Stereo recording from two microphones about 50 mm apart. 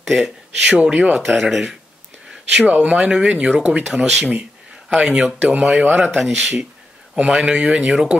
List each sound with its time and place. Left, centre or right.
0.0 s speech: centre
1.1 s speech: centre
2.6 s speech: right
3.9 s speech: centre
4.3 s speech: right
6.1 s speech: centre
7.2 s speech: centre